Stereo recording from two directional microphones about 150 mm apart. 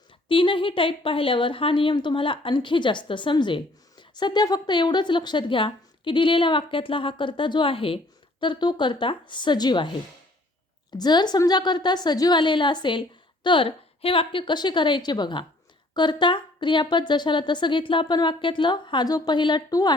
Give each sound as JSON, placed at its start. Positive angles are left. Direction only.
{"t": 0.3, "sound": "speech", "side_deg": 35}
{"t": 10.9, "sound": "speech", "side_deg": 30}